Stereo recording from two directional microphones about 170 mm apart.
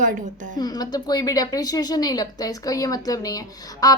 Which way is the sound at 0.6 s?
20° left (ahead or behind).